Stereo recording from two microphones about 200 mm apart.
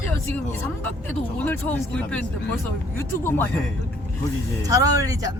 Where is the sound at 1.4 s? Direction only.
10° left (ahead or behind).